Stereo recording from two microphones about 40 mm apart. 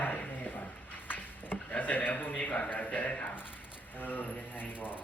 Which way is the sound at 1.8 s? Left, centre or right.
Left.